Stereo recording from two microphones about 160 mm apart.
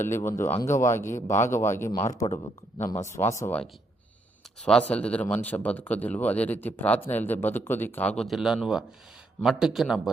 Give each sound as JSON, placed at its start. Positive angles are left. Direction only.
{"t": 0.0, "sound": "speech", "side_deg": 15}